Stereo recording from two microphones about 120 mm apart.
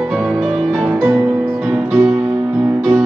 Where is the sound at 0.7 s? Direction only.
5° right (ahead or behind).